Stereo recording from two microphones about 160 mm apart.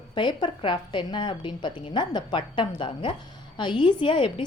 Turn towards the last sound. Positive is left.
turn(degrees=30)  # may be behind; listen again after turning